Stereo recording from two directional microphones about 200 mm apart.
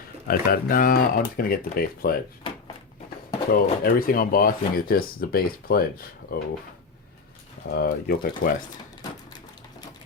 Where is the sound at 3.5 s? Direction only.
45° left (ahead or behind).